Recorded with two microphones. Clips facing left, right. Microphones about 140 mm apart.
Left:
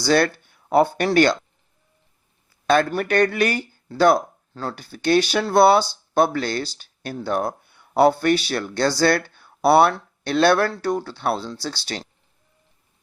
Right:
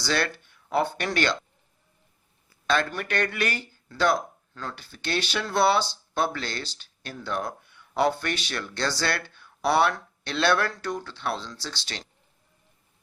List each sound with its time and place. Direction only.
0.0 s speech: 40° left (ahead or behind)
2.9 s speech: 35° left (ahead or behind)